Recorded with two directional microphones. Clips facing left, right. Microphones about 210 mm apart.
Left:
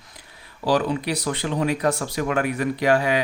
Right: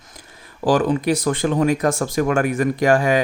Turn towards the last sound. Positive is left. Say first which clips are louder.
# right 4 dB
turn(degrees=-45)  # may be behind; listen again after turning